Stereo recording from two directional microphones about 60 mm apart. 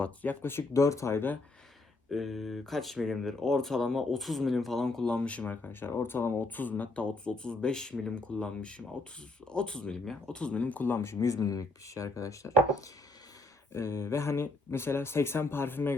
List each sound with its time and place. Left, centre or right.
0.0 s speech: left
0.7 s speech: left
2.0 s speech: centre; by 5.5 s left
6.0 s speech: left
10.9 s speech: left